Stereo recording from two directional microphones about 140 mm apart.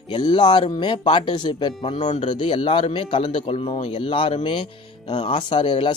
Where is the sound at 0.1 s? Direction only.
35° left (ahead or behind).